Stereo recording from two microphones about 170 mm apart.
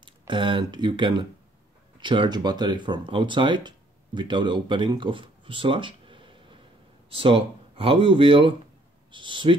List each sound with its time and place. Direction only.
0.3 s speech: 30° right (ahead or behind)